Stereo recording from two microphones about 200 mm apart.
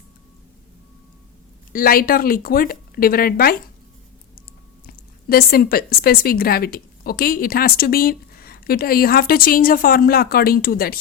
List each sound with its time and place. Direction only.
1.7 s a woman's voice: 45° left (ahead or behind)
5.3 s a woman's voice: 50° left (ahead or behind)